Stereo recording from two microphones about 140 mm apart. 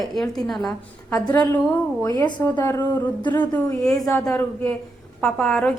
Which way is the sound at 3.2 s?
30° left (ahead or behind).